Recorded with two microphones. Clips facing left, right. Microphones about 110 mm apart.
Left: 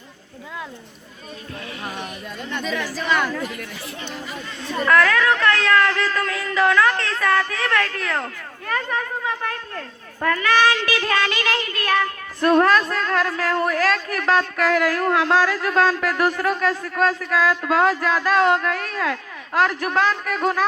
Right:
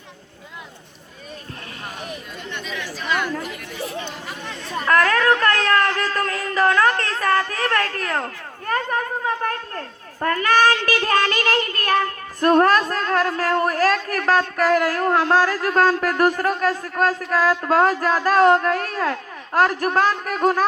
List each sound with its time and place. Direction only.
4.9 s a man's voice: 40° right (ahead or behind)